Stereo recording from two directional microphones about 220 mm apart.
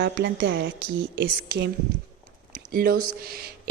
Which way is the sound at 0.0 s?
50° right (ahead or behind).